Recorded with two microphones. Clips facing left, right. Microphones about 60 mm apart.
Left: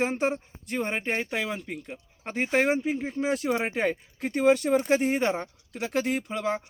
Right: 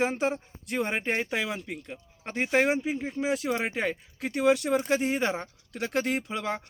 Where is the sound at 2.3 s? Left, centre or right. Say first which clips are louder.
Even; centre.